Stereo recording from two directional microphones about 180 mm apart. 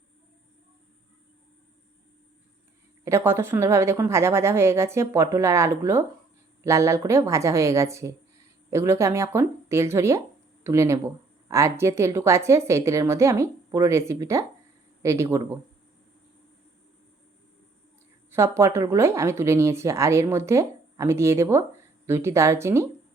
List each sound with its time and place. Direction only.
3.0 s a woman's voice: 15° right (ahead or behind)
18.3 s a woman's voice: 15° right (ahead or behind)